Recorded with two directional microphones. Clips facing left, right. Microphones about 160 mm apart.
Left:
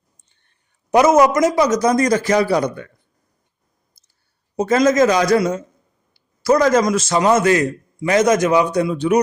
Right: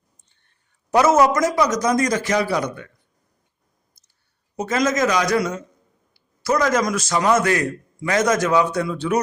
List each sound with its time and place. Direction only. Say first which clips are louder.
0.9 s a man's voice: left 3 dB; 20° left (ahead or behind); by 2.9 s 35° left (ahead or behind)
4.5 s a man's voice: left 6 dB; 35° left (ahead or behind); by 9.2 s 15° left (ahead or behind)